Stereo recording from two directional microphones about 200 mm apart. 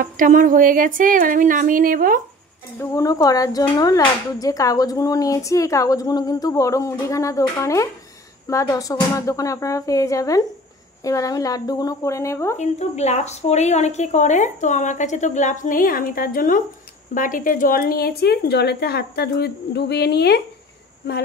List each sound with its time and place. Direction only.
0.0 s speech: 40° right (ahead or behind)
2.8 s speech: 15° left (ahead or behind)
12.5 s a woman's voice: 35° left (ahead or behind); by 20.4 s 55° left (ahead or behind)